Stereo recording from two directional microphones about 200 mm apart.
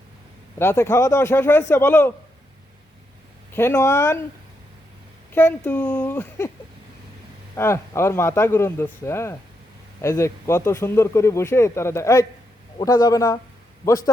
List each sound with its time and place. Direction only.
0.6 s speech: 10° left (ahead or behind)
3.5 s speech: 10° left (ahead or behind)
5.3 s speech: 10° left (ahead or behind)
7.5 s speech: 15° left (ahead or behind)